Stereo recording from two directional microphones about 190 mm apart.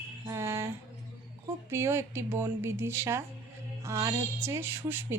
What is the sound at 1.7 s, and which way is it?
A woman's voice, 15° right (ahead or behind).